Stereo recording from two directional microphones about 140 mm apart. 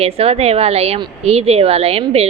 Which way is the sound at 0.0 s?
45° right (ahead or behind).